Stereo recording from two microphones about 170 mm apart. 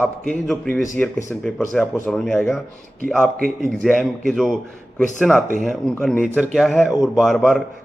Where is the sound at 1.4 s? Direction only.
5° left (ahead or behind).